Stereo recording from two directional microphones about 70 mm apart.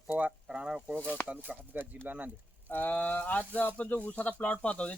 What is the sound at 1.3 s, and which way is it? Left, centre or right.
Speech, right.